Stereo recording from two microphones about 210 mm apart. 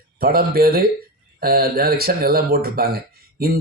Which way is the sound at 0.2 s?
45° right (ahead or behind).